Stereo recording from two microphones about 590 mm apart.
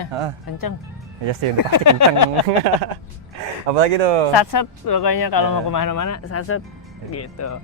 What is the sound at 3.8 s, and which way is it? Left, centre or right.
Speech, right.